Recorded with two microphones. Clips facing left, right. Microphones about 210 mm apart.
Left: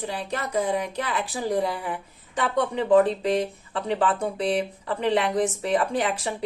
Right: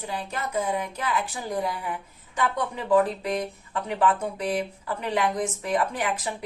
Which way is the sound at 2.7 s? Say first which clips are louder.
Left 3 dB; 30° left (ahead or behind).